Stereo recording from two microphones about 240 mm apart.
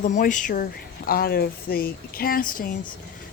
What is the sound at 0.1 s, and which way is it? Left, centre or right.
A woman's voice, left.